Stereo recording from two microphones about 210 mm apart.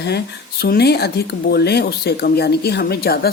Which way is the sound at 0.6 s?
50° left (ahead or behind).